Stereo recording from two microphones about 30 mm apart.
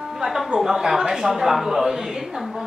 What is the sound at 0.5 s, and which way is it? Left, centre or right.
A woman's voice, centre.